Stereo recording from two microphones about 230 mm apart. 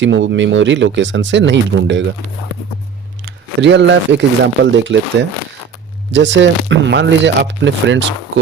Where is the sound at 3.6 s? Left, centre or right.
Right.